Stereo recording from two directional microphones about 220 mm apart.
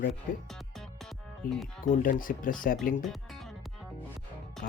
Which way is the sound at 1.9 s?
40° left (ahead or behind).